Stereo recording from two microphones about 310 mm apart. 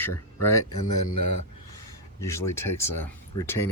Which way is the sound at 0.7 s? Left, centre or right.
Left.